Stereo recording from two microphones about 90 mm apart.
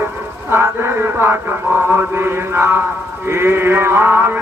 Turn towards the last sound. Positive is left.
turn(degrees=-25)  # may be behind; listen again after turning